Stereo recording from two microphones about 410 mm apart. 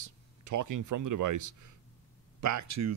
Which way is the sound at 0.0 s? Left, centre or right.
Right.